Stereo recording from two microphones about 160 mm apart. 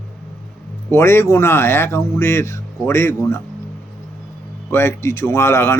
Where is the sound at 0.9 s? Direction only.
15° left (ahead or behind).